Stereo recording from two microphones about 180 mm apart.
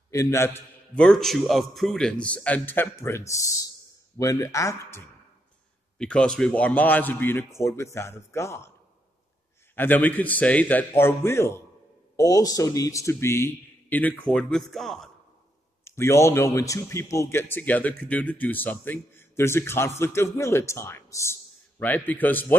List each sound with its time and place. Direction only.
0.1 s speech: 15° left (ahead or behind)
5.9 s speech: 5° left (ahead or behind)
9.8 s speech: 10° left (ahead or behind)
15.8 s a man's voice: 15° left (ahead or behind)